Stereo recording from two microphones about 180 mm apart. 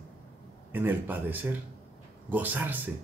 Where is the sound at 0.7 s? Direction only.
10° right (ahead or behind).